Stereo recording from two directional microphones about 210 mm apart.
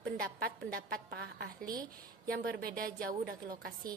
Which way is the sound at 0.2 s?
45° right (ahead or behind).